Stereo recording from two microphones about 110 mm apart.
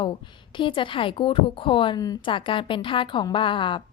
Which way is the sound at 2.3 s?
50° left (ahead or behind).